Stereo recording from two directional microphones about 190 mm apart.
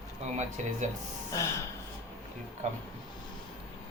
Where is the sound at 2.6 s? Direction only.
40° right (ahead or behind).